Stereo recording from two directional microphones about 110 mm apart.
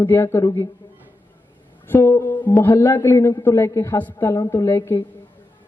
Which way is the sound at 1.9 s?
20° left (ahead or behind).